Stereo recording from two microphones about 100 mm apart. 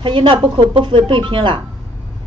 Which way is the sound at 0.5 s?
55° right (ahead or behind).